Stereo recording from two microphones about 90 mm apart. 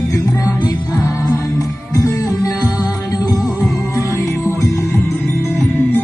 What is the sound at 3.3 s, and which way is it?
Music, centre (ahead or behind).